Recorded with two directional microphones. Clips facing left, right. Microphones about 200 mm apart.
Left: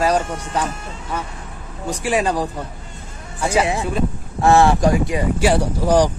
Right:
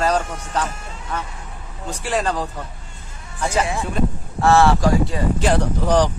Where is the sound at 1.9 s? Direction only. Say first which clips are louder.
Left 3 dB; 10° left (ahead or behind).